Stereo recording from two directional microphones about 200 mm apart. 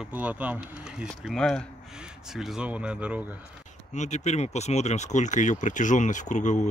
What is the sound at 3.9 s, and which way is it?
Speech, 35° left (ahead or behind).